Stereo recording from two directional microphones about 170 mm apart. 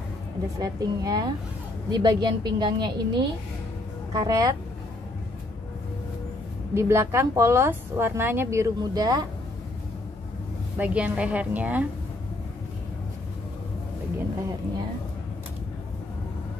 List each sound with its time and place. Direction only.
0.6 s a woman's voice: 20° right (ahead or behind)
6.7 s a woman's voice: 15° right (ahead or behind)
10.8 s a woman's voice: 10° right (ahead or behind)